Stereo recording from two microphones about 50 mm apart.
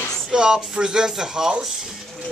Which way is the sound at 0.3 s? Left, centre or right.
Centre.